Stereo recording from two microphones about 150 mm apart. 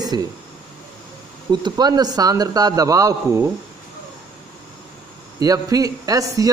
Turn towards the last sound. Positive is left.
turn(degrees=-25)  # may be behind; listen again after turning